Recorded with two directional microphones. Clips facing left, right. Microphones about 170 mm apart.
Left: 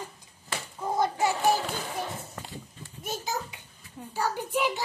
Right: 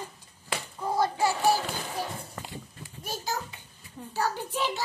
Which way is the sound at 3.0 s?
20° left (ahead or behind).